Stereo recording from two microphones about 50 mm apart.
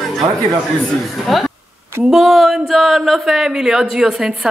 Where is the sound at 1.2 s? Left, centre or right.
Centre.